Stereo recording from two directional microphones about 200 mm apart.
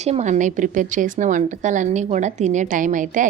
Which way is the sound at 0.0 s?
35° right (ahead or behind).